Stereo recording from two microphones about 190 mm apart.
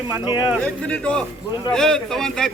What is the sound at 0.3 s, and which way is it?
Speech, 25° left (ahead or behind).